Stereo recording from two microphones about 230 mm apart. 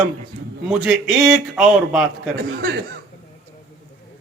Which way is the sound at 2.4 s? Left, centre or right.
Right.